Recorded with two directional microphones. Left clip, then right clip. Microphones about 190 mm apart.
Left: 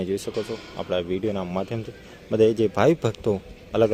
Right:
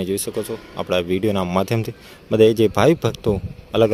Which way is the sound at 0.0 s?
10° right (ahead or behind).